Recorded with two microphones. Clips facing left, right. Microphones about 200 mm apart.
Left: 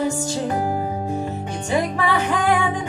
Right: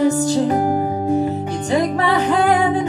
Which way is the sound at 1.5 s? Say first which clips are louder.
Right 4 dB; 10° left (ahead or behind).